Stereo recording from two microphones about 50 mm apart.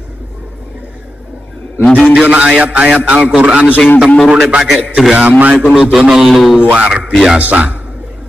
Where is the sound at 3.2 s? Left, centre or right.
Centre.